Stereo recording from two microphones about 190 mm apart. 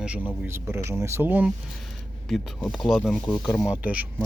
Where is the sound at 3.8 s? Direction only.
10° right (ahead or behind).